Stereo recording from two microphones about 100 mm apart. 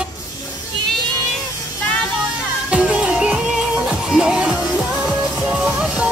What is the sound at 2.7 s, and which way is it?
Music, 10° right (ahead or behind).